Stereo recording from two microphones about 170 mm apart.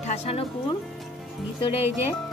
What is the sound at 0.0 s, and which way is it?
Speech, 35° left (ahead or behind).